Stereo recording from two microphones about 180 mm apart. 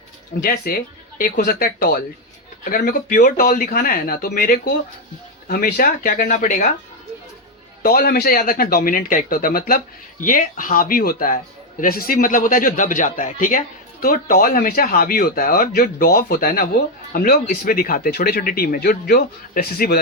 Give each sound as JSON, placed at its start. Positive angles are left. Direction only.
{"t": 0.4, "sound": "speech", "side_deg": 55}
{"t": 7.8, "sound": "speech", "side_deg": 55}